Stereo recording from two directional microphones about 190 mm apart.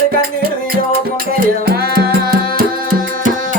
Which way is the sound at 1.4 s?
55° right (ahead or behind).